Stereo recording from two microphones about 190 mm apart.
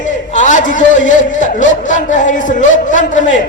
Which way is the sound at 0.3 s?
40° left (ahead or behind).